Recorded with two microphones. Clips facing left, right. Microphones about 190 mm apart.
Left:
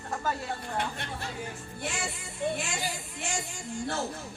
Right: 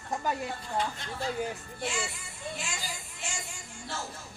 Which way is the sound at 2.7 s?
60° left (ahead or behind).